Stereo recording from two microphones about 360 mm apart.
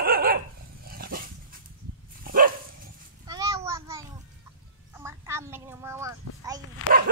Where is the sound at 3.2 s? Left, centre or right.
Centre.